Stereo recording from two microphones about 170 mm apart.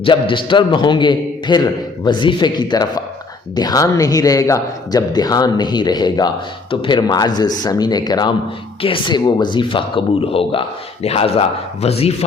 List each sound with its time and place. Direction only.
0.0 s a man's voice: 30° left (ahead or behind)